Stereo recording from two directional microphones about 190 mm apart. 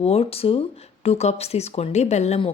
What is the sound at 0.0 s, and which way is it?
A woman's voice, 30° left (ahead or behind).